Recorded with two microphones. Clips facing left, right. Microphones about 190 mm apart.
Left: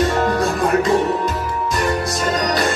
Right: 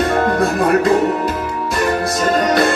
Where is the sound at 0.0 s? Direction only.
55° right (ahead or behind).